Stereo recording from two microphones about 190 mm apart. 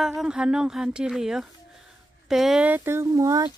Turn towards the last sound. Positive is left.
turn(degrees=-20)  # may be behind; listen again after turning